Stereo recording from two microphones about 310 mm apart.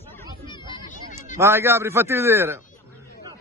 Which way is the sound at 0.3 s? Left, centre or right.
Centre.